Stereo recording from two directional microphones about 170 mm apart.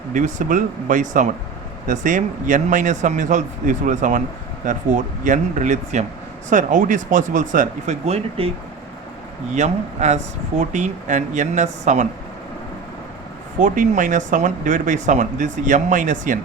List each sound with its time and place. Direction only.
0.1 s speech: 50° right (ahead or behind)
9.6 s speech: 45° right (ahead or behind)
13.6 s speech: 50° right (ahead or behind)